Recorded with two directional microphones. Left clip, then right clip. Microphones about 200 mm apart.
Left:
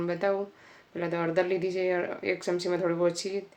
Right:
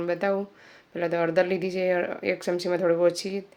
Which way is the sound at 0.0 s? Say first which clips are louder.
Right 2 dB; 25° right (ahead or behind).